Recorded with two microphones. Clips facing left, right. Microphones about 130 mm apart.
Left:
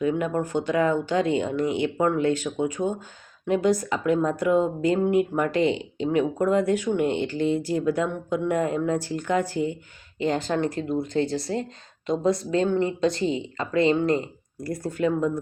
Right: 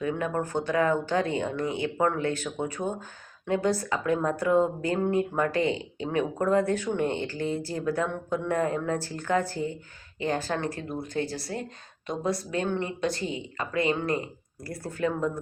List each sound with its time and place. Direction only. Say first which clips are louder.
0.0 s speech: left 4 dB; 20° left (ahead or behind)